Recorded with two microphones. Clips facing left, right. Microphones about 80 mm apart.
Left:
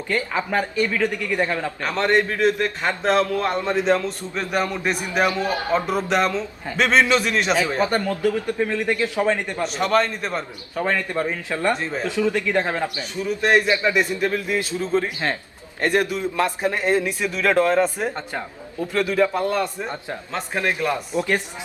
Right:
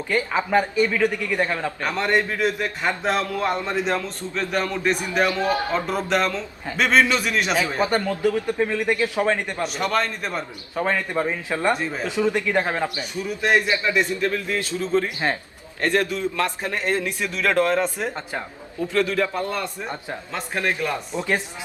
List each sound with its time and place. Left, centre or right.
0.1 s a man's voice: centre
1.8 s a man's voice: centre
4.4 s a man's voice: centre
5.2 s a man's voice: left
5.8 s a man's voice: centre
7.8 s a man's voice: centre
9.6 s a man's voice: centre
10.8 s a man's voice: centre
11.7 s a man's voice: centre
12.0 s a man's voice: right
13.5 s a man's voice: left